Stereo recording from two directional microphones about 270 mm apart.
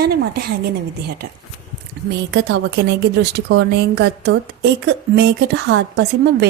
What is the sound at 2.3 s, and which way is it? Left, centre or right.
A woman's voice, right.